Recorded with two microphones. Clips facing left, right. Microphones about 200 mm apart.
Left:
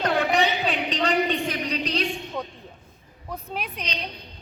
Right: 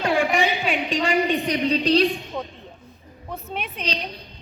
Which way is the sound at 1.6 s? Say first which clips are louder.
Right 8 dB; 30° right (ahead or behind).